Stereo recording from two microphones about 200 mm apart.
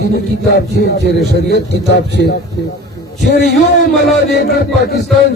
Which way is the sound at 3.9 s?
Centre (ahead or behind).